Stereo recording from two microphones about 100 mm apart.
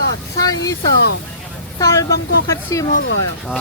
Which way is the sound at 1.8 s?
35° left (ahead or behind).